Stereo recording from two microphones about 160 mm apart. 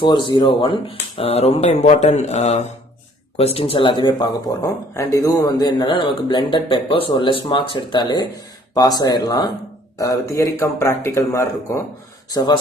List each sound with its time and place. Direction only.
0.0 s speech: 30° left (ahead or behind)